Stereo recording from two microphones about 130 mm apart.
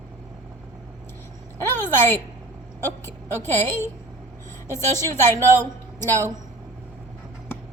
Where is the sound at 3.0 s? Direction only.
15° left (ahead or behind).